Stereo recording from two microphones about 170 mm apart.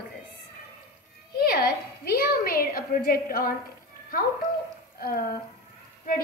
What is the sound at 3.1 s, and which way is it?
Speech, 60° left (ahead or behind).